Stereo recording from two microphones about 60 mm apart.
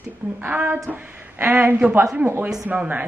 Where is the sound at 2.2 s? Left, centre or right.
Right.